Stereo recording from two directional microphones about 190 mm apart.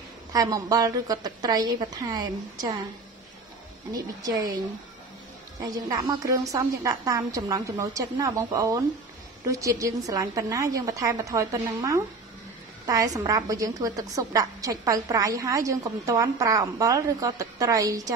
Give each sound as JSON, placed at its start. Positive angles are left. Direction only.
{"t": 0.3, "sound": "a woman's voice", "side_deg": -20}
{"t": 3.9, "sound": "a woman's voice", "side_deg": -20}
{"t": 5.6, "sound": "a woman's voice", "side_deg": -20}